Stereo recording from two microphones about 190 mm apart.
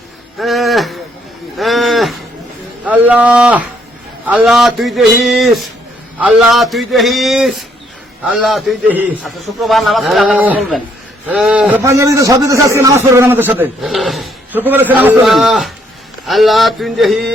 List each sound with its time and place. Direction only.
0.3 s a sound: centre (ahead or behind)
1.5 s cattle: centre (ahead or behind)
2.8 s a man's voice: 5° right (ahead or behind)
11.8 s a man's voice: 15° right (ahead or behind)
13.6 s a man's voice: centre (ahead or behind)